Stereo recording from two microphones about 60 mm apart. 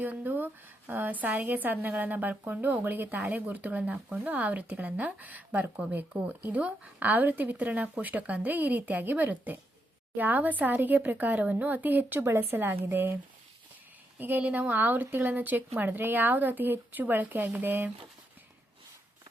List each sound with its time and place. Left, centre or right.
0.0 s a woman's voice: right
12.2 s speech: right
14.2 s a woman's voice: right